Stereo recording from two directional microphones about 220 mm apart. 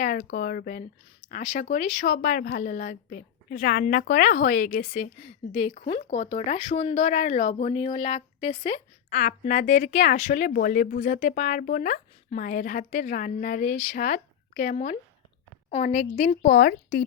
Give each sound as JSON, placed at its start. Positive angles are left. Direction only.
{"t": 0.0, "sound": "speech", "side_deg": 40}
{"t": 9.0, "sound": "speech", "side_deg": 35}